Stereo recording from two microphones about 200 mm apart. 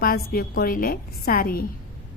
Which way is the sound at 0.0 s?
45° left (ahead or behind).